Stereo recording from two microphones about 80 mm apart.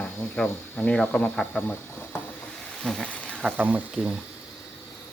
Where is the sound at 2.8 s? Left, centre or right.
Centre.